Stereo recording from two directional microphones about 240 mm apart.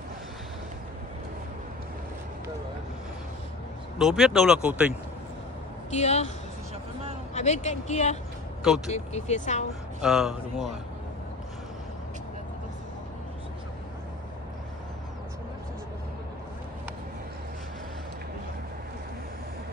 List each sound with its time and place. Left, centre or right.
4.0 s speech: centre
5.9 s speech: left
7.3 s speech: left
10.0 s speech: centre